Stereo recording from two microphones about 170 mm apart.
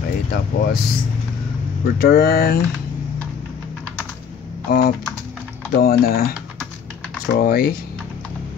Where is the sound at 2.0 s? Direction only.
60° left (ahead or behind).